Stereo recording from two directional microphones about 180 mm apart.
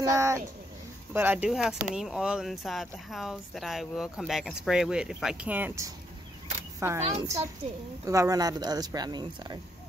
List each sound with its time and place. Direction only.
0.0 s speech: 15° right (ahead or behind)